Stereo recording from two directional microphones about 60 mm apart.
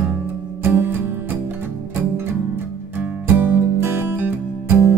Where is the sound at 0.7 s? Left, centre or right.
Right.